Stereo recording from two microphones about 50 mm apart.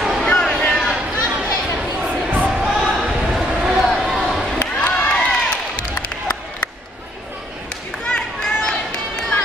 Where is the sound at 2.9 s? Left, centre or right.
Centre.